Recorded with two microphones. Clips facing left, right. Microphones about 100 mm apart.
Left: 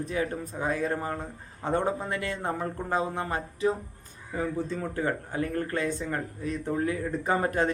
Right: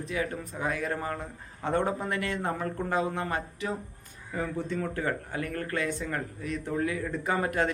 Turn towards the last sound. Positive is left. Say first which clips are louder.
# left 2 dB
turn(degrees=30)  # may be behind; listen again after turning